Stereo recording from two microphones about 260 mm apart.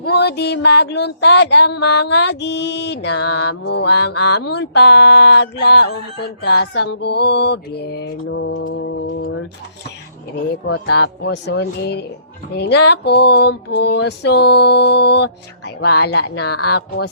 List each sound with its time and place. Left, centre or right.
0.0 s speech: left
11.2 s speech: left